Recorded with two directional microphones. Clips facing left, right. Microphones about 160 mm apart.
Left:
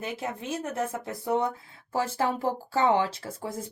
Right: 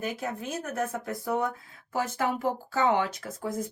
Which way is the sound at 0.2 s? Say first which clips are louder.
Left 1 dB; 25° left (ahead or behind).